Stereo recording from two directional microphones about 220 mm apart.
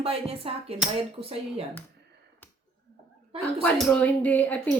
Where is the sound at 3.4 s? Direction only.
5° left (ahead or behind).